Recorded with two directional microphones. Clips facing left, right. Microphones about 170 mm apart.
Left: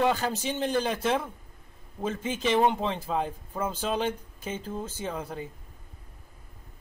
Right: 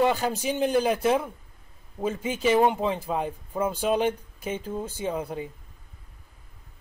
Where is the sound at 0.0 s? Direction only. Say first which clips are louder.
Right 2 dB; 10° right (ahead or behind).